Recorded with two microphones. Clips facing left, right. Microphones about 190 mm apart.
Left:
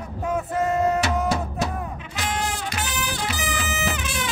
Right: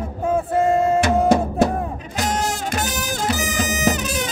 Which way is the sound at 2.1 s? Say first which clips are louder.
Right 5 dB; 40° right (ahead or behind).